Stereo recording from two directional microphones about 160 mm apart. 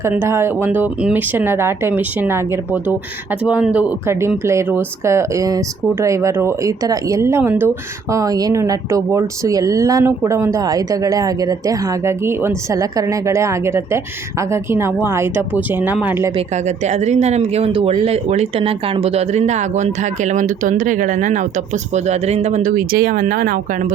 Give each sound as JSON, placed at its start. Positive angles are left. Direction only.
{"t": 0.0, "sound": "speech", "side_deg": -15}
{"t": 16.6, "sound": "speech", "side_deg": -45}